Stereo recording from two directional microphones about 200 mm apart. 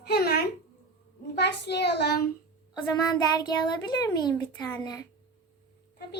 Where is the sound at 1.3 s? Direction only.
55° left (ahead or behind).